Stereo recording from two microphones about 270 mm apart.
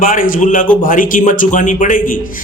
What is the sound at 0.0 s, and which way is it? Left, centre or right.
A woman's voice, left.